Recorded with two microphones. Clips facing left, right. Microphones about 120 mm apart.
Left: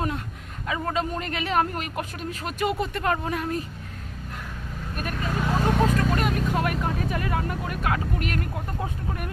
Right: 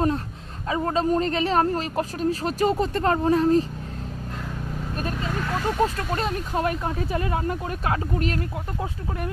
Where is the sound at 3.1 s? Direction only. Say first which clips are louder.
Right 9 dB; 30° right (ahead or behind).